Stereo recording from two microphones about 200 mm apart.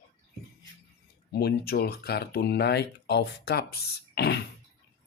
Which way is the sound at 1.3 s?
50° left (ahead or behind).